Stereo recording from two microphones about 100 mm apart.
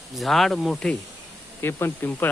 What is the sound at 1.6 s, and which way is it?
Speech, 20° left (ahead or behind).